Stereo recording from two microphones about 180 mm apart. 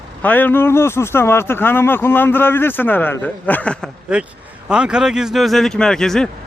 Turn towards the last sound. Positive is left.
turn(degrees=5)  # may be behind; listen again after turning